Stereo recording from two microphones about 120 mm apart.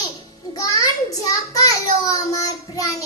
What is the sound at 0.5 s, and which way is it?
A child's voice, 30° left (ahead or behind).